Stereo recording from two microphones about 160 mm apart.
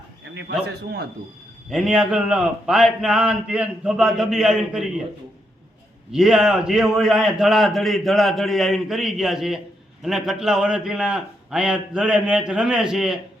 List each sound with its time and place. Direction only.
0.6 s a man's voice: 90° right
1.7 s a man's voice: 5° right (ahead or behind)
6.1 s a man's voice: 5° right (ahead or behind)